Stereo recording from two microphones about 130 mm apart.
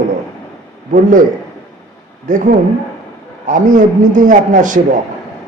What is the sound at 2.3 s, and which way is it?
A man's voice, 90° right.